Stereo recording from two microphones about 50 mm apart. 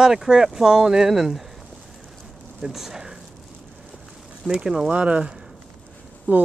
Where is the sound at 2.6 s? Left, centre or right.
Centre.